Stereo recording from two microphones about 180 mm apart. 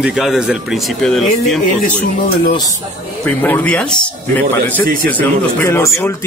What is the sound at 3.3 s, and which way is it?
Speech, 10° left (ahead or behind).